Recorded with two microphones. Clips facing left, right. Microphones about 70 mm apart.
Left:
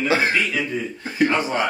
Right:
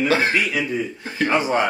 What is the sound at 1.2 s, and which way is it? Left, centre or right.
Speech, right.